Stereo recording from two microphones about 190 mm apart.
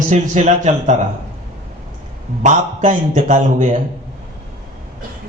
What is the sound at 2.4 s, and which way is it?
A man's voice, 40° right (ahead or behind).